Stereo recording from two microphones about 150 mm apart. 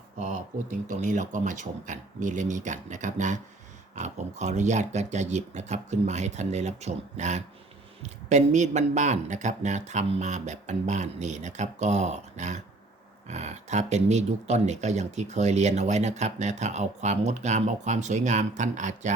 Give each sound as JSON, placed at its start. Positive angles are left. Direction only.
{"t": 0.2, "sound": "speech", "side_deg": -55}